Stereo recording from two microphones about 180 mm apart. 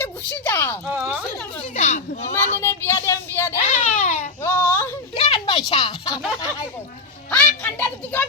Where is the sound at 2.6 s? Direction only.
15° left (ahead or behind).